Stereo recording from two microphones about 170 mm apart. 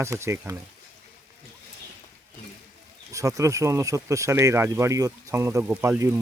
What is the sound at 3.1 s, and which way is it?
Speech, 20° right (ahead or behind).